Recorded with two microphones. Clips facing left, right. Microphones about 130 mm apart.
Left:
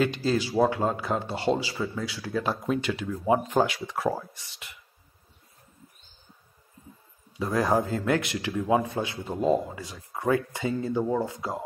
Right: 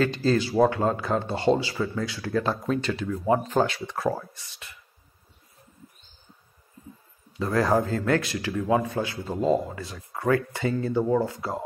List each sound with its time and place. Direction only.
0.0 s a man's voice: 10° left (ahead or behind)
7.3 s a man's voice: 15° left (ahead or behind)